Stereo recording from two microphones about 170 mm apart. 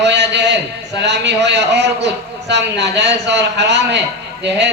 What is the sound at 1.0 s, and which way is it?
Speech, 90° right.